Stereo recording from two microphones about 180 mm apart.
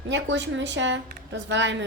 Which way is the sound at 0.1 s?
90° right.